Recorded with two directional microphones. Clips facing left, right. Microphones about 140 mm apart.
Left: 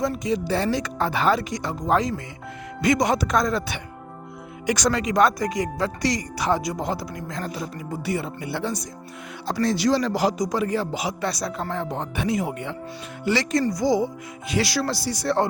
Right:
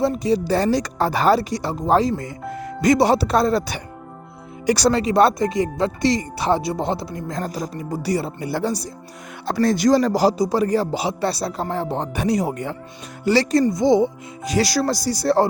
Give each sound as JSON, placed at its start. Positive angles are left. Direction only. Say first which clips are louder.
{"t": 0.0, "sound": "speech", "louder": "right 5 dB", "side_deg": -30}
{"t": 9.5, "sound": "speech", "louder": "right 5 dB", "side_deg": -55}
{"t": 13.7, "sound": "speech", "louder": "right 5 dB", "side_deg": -25}
{"t": 14.4, "sound": "speech", "louder": "right 4 dB", "side_deg": -40}